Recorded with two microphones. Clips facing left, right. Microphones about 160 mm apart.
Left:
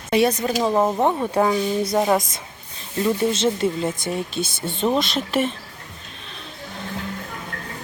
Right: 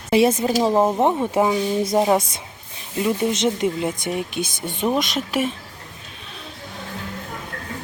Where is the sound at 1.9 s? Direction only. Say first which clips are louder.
Right 2 dB; 20° right (ahead or behind).